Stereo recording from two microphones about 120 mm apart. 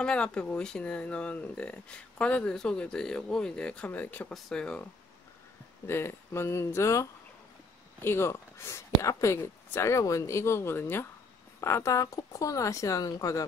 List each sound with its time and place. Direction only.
0.0 s speech: 10° left (ahead or behind)
5.9 s speech: 20° left (ahead or behind)